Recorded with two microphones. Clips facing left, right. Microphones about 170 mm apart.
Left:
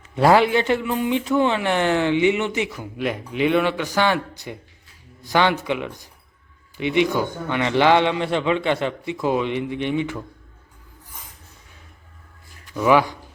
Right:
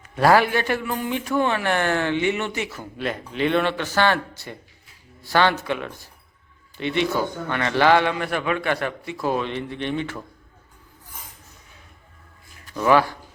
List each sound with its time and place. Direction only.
0.0 s a man's voice: 20° left (ahead or behind)
12.7 s a man's voice: 10° left (ahead or behind)